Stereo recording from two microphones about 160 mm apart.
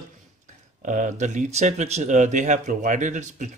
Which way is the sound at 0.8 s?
50° right (ahead or behind).